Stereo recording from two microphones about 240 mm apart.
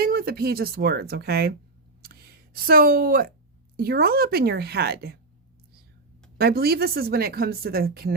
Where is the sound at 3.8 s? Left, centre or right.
Right.